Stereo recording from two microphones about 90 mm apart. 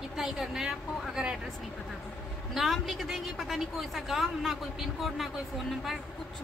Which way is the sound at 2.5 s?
Centre (ahead or behind).